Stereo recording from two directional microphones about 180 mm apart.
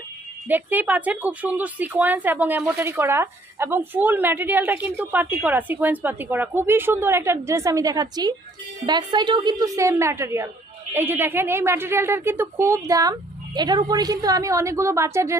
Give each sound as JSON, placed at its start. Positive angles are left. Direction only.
{"t": 0.4, "sound": "speech", "side_deg": -10}